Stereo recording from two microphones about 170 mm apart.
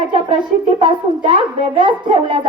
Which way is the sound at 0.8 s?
30° right (ahead or behind).